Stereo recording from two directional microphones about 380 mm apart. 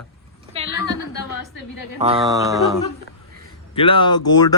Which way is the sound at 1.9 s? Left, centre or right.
Centre.